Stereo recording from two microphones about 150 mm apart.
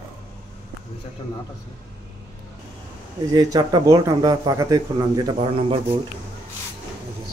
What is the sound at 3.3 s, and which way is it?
Speech, 30° right (ahead or behind).